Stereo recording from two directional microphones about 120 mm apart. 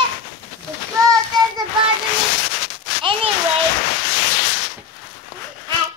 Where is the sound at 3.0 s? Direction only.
50° right (ahead or behind).